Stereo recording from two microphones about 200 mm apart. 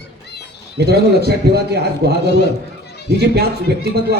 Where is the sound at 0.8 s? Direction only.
55° right (ahead or behind).